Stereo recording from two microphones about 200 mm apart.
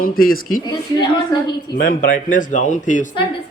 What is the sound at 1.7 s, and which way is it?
Speech, 45° left (ahead or behind).